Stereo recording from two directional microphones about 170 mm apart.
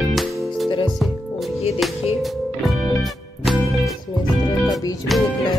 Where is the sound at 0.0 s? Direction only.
Centre (ahead or behind).